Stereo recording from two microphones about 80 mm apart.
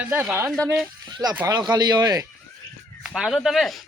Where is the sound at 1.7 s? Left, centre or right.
Right.